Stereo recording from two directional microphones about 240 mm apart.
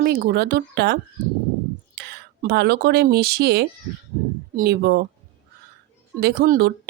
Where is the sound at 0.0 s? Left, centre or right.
Right.